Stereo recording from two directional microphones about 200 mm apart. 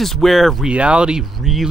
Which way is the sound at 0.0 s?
Centre (ahead or behind).